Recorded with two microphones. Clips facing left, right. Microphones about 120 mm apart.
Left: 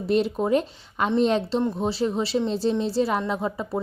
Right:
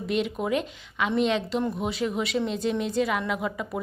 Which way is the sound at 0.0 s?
35° left (ahead or behind).